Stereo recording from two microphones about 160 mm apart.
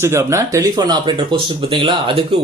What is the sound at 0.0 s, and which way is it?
Speech, 20° right (ahead or behind).